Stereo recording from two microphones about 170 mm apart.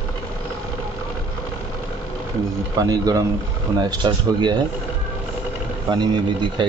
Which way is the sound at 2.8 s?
20° right (ahead or behind).